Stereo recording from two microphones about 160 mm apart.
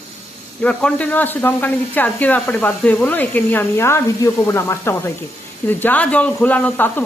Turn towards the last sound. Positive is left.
turn(degrees=10)  # may be behind; listen again after turning